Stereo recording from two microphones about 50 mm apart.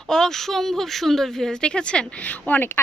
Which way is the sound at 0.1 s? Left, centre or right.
Centre.